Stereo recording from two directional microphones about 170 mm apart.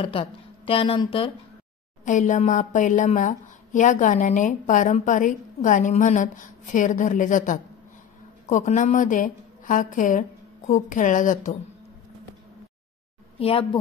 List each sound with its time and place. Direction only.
0.0 s a woman's voice: 30° left (ahead or behind)
2.0 s a woman's voice: 45° left (ahead or behind)
13.4 s a woman's voice: 35° left (ahead or behind)